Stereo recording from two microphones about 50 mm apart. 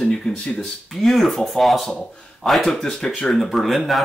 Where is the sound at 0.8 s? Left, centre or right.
Centre.